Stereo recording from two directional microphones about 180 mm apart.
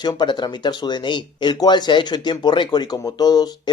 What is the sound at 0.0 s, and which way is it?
Speech, 25° left (ahead or behind).